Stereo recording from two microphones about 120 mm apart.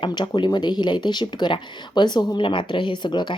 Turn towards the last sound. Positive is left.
turn(degrees=40)  # may be behind; listen again after turning